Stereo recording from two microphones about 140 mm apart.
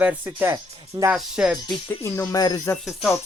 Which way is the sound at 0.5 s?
25° right (ahead or behind).